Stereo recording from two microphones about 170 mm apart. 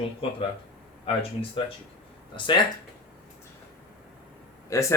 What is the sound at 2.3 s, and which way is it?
Speech, 30° left (ahead or behind).